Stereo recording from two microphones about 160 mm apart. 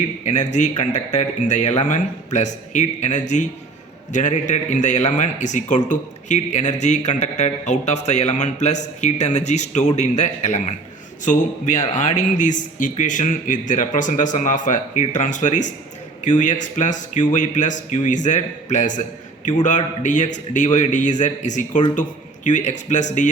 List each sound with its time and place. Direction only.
0.3 s a man's voice: 50° left (ahead or behind)